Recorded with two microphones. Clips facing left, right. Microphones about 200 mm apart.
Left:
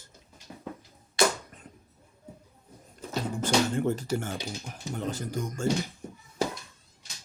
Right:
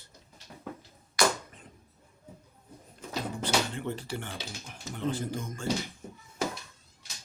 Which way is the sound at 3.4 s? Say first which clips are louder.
Left 6 dB; 45° left (ahead or behind).